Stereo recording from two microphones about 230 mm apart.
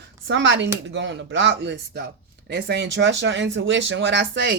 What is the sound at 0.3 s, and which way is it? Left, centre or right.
Speech, right.